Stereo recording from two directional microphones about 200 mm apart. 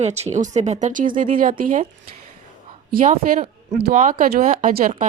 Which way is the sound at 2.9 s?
45° right (ahead or behind).